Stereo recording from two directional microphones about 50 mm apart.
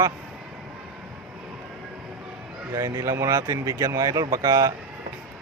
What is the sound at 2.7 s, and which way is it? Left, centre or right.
Speech, right.